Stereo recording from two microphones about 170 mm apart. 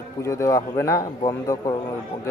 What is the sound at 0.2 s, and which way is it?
A man's voice, 15° left (ahead or behind).